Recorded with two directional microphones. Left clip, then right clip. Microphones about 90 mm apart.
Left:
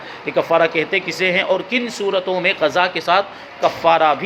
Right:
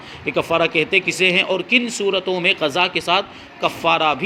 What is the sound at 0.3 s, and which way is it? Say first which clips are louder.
A man's voice: left 2 dB; 75° right (ahead or behind).